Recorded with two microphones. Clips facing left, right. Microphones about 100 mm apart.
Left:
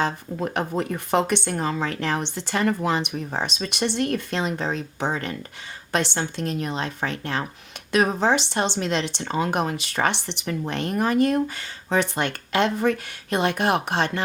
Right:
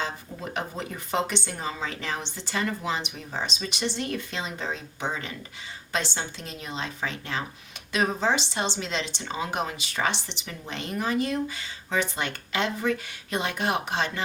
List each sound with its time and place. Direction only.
0.0 s speech: 60° left (ahead or behind)